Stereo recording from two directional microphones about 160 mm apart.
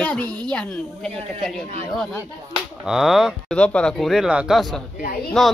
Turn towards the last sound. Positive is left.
turn(degrees=0)  # may be behind; listen again after turning